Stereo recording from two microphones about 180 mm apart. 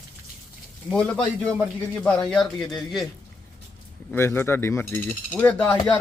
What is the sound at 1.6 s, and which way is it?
Speech, 5° left (ahead or behind).